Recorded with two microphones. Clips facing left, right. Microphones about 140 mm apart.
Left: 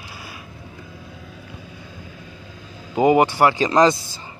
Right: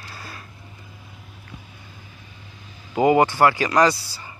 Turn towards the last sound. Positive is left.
turn(degrees=20)  # may be behind; listen again after turning